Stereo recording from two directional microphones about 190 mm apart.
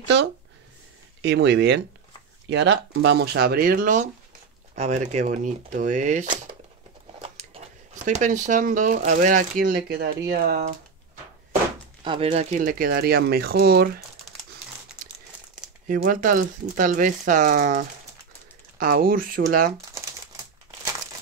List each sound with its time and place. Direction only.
1.2 s speech: 60° right (ahead or behind)
12.0 s speech: 30° right (ahead or behind)
12.6 s speech: 50° right (ahead or behind)
15.9 s speech: 45° right (ahead or behind)